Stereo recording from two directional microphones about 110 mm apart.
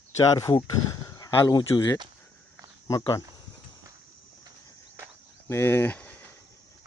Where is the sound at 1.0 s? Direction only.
35° left (ahead or behind).